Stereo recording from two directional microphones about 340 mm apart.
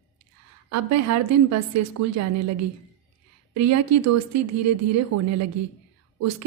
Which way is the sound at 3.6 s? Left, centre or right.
Right.